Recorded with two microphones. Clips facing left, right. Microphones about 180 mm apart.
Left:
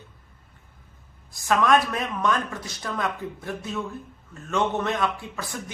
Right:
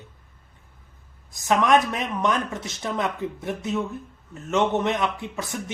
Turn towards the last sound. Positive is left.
turn(degrees=-20)  # may be behind; listen again after turning